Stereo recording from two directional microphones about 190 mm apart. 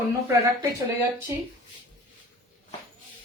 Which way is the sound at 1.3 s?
15° right (ahead or behind).